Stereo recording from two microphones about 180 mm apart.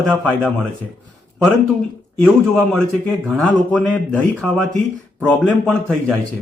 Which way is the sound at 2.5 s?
5° left (ahead or behind).